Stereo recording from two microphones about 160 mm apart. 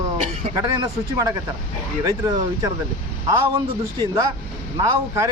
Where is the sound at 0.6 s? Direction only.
20° right (ahead or behind).